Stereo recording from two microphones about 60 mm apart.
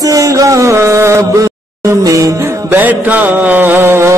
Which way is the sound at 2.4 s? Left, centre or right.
Right.